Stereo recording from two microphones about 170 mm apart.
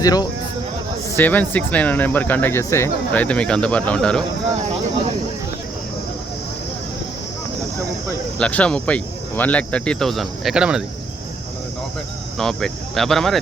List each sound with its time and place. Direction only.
0.0 s speech: 20° left (ahead or behind)
1.1 s speech: 10° left (ahead or behind)
8.4 s speech: 5° left (ahead or behind)
12.4 s speech: 5° left (ahead or behind)